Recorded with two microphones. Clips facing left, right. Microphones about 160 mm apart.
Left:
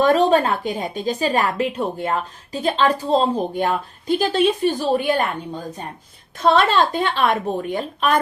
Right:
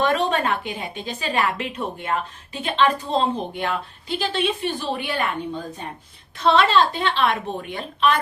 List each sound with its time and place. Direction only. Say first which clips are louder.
0.0 s a woman's voice: left 6 dB; 35° left (ahead or behind)
3.5 s a woman's voice: left 5 dB; 45° left (ahead or behind)
6.4 s a woman's voice: left 1 dB; 45° left (ahead or behind)